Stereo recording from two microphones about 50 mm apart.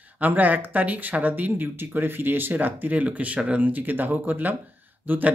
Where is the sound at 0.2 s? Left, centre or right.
Right.